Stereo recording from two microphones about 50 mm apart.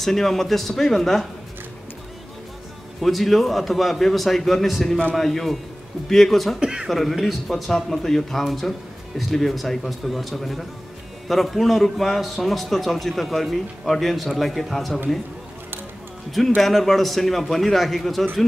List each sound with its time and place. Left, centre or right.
0.0 s a man's voice: centre
3.0 s a man's voice: centre
6.6 s a sound: centre
6.9 s a man's voice: centre
16.3 s a man's voice: centre